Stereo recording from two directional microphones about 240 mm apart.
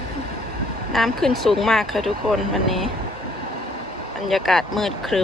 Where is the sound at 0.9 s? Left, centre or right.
Centre.